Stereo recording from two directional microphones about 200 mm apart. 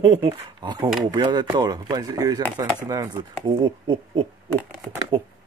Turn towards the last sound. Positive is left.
turn(degrees=-25)  # may be behind; listen again after turning